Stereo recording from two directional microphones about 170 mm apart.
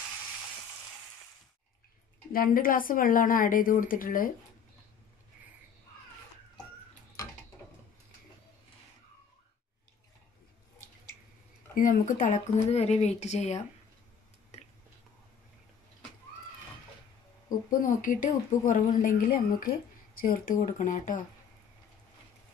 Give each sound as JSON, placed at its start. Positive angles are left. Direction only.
{"t": 2.3, "sound": "a woman's voice", "side_deg": 55}
{"t": 11.7, "sound": "speech", "side_deg": 55}
{"t": 17.6, "sound": "speech", "side_deg": 50}